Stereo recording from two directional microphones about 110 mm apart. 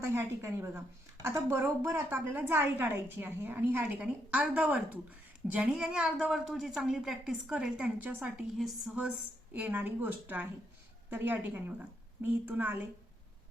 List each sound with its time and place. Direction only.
0.0 s a woman's voice: 25° right (ahead or behind); by 9.1 s 5° right (ahead or behind)
9.5 s a woman's voice: 15° right (ahead or behind)